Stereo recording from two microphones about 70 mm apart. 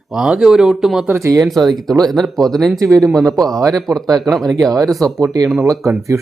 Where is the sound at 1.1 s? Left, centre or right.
Right.